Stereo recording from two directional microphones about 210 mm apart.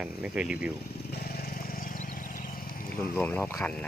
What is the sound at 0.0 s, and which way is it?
Speech, 5° right (ahead or behind).